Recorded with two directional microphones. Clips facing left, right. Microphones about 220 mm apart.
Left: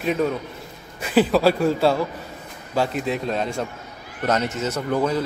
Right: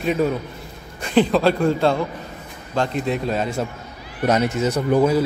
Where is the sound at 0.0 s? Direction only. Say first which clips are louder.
Right 2 dB; centre (ahead or behind).